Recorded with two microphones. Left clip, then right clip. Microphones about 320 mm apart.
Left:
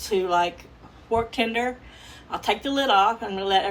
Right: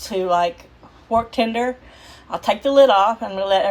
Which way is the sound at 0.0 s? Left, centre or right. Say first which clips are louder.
Right 3 dB; centre.